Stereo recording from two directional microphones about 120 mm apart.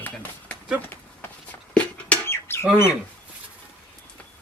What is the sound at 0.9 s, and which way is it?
Rodents, 15° left (ahead or behind).